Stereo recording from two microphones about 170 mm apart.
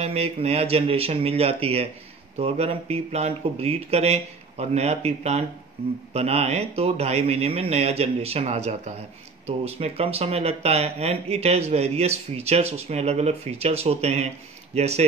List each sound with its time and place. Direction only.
0.0 s speech: 35° right (ahead or behind)